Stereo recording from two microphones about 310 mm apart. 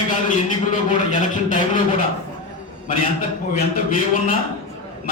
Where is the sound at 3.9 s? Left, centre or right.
Left.